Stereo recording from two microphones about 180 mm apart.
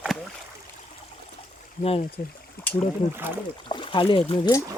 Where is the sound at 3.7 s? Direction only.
30° left (ahead or behind).